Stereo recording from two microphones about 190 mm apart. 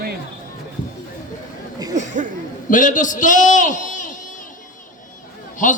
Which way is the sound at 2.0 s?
40° right (ahead or behind).